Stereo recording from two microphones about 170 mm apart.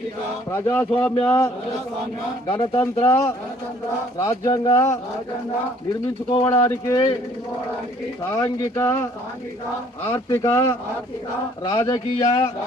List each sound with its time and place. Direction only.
0.5 s speech: 10° left (ahead or behind)
2.5 s speech: 15° left (ahead or behind)
6.3 s speech: 20° left (ahead or behind)
8.2 s speech: 15° left (ahead or behind)
10.3 s speech: 15° left (ahead or behind)